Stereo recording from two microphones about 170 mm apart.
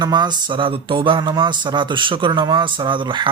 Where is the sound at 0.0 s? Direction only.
25° right (ahead or behind).